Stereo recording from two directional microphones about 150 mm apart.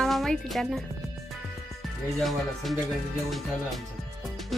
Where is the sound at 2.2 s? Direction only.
Centre (ahead or behind).